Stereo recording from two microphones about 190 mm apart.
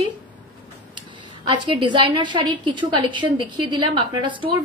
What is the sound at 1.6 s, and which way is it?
A woman's voice, 25° right (ahead or behind).